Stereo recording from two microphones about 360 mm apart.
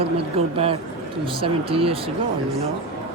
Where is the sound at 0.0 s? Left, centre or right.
Centre.